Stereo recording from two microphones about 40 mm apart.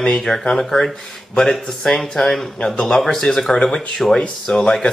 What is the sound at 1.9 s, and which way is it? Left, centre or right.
Speech, centre.